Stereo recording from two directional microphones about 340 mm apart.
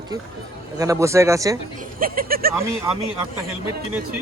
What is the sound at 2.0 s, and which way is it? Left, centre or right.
Speech, right.